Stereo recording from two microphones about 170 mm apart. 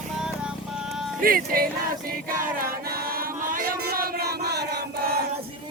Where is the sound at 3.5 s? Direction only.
60° right (ahead or behind).